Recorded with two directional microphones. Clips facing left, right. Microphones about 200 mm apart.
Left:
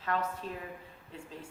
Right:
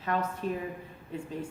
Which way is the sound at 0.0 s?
15° right (ahead or behind).